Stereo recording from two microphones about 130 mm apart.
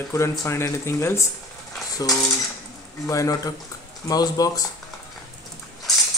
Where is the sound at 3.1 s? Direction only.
25° left (ahead or behind).